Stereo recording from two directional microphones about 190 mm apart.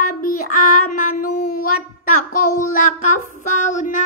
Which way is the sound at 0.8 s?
45° left (ahead or behind).